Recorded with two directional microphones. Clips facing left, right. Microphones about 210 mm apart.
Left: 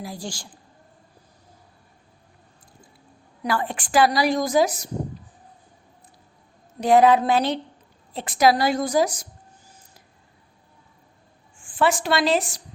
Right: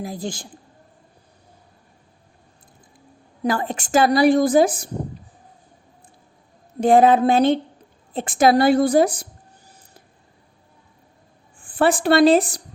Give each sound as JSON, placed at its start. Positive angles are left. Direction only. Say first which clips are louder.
{"t": 0.0, "sound": "a woman's voice", "louder": "right 5 dB", "side_deg": -20}
{"t": 3.7, "sound": "a woman's voice", "louder": "right 2 dB", "side_deg": -45}
{"t": 6.7, "sound": "a woman's voice", "louder": "right 2 dB", "side_deg": -50}
{"t": 11.6, "sound": "speech", "louder": "right 4 dB", "side_deg": -55}